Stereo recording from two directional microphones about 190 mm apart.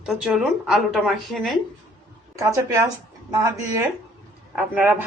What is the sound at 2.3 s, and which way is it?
Speech, 15° right (ahead or behind).